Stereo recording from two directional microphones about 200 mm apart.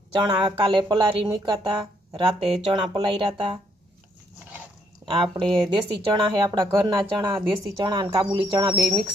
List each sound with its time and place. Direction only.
0.1 s speech: 20° right (ahead or behind)
5.2 s speech: 25° right (ahead or behind)
8.7 s speech: centre (ahead or behind)